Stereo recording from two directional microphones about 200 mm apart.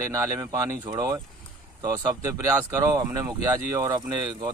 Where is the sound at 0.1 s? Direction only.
15° right (ahead or behind).